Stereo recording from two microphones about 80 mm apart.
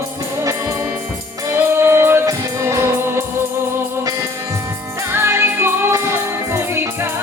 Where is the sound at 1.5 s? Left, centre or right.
Right.